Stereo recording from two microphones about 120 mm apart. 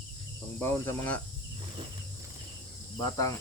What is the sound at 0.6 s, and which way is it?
Speech, 15° left (ahead or behind).